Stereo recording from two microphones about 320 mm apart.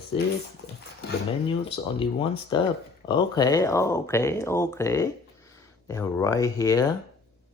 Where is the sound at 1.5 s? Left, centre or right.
Centre.